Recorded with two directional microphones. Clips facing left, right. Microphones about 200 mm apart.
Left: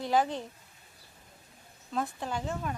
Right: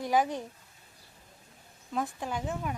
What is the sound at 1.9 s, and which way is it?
Speech, 10° right (ahead or behind).